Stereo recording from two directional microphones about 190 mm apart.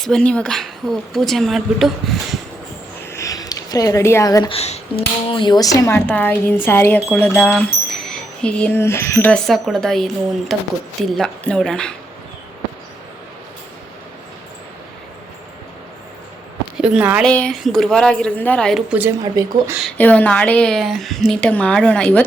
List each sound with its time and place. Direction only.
0.0 s a woman's voice: 5° left (ahead or behind)
3.0 s a sound: 15° left (ahead or behind)
4.5 s speech: 35° left (ahead or behind); by 10.1 s centre (ahead or behind)
11.1 s a woman's voice: 5° left (ahead or behind)
16.7 s a woman's voice: 5° right (ahead or behind)
17.2 s a woman's voice: 5° left (ahead or behind)
19.2 s speech: 20° right (ahead or behind)
19.8 s a woman's voice: 10° left (ahead or behind)